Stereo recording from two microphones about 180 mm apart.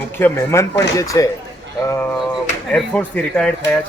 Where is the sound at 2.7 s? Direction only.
5° left (ahead or behind).